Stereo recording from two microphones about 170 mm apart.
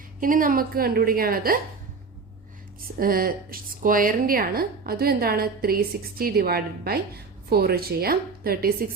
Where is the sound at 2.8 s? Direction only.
60° right (ahead or behind).